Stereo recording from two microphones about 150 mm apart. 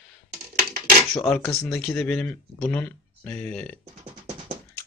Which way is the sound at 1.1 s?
Centre (ahead or behind).